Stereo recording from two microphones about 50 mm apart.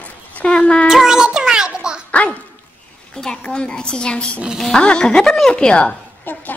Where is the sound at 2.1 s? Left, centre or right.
Left.